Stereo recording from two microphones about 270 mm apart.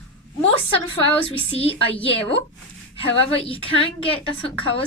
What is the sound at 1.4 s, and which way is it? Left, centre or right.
A woman's voice, left.